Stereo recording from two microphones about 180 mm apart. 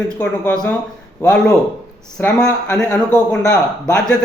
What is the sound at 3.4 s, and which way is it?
Speech, 15° left (ahead or behind).